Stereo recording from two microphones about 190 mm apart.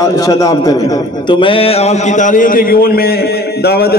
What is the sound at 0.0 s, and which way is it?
A man's voice, 20° left (ahead or behind).